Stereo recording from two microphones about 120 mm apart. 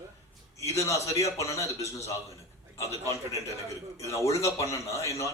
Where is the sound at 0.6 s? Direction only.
25° left (ahead or behind).